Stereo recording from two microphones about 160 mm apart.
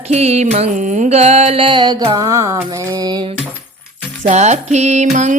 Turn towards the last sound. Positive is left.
turn(degrees=-45)  # may be behind; listen again after turning